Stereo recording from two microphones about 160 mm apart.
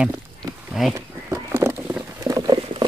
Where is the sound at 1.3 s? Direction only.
15° right (ahead or behind).